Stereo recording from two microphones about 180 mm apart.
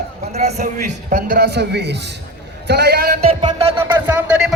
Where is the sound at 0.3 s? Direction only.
40° right (ahead or behind); by 3.2 s 60° right (ahead or behind).